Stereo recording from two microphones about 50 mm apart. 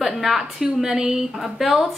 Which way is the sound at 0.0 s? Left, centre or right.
Centre.